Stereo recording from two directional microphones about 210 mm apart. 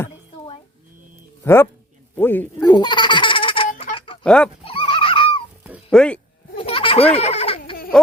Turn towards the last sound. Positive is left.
turn(degrees=25)  # may be behind; listen again after turning